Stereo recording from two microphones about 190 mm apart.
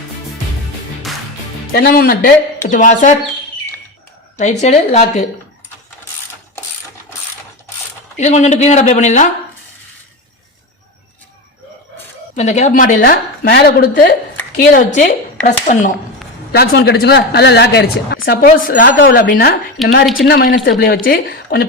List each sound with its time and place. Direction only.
1.7 s speech: 50° left (ahead or behind)
4.4 s speech: 35° left (ahead or behind)
8.1 s speech: 40° left (ahead or behind)
12.4 s speech: 35° left (ahead or behind)
16.5 s speech: 60° left (ahead or behind)
18.3 s speech: 45° left (ahead or behind)
18.9 s speech: 60° left (ahead or behind)
19.8 s speech: centre (ahead or behind)
20.2 s speech: 55° left (ahead or behind)